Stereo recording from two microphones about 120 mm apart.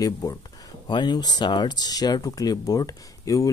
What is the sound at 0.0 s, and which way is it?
Speech, 30° left (ahead or behind).